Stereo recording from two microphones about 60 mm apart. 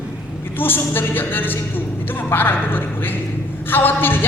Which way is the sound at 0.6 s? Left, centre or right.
Left.